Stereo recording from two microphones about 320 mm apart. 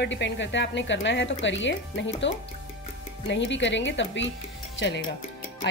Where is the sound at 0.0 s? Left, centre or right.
Left.